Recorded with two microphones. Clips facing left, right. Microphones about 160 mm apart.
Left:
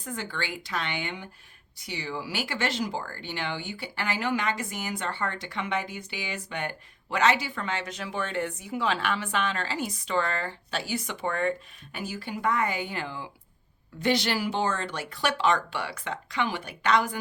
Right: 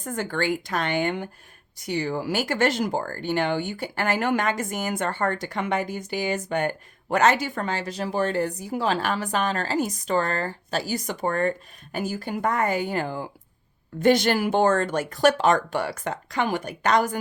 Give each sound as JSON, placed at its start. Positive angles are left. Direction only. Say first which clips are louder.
{"t": 0.0, "sound": "speech", "louder": "right 8 dB", "side_deg": -45}